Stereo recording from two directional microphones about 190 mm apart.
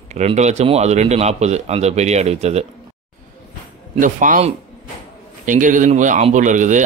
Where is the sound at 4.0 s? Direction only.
45° right (ahead or behind).